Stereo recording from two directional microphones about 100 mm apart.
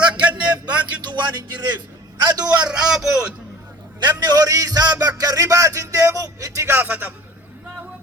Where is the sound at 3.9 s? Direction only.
45° right (ahead or behind); by 7.1 s 20° right (ahead or behind).